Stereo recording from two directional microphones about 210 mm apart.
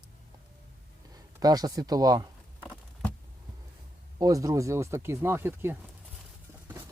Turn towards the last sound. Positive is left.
turn(degrees=-10)  # may be behind; listen again after turning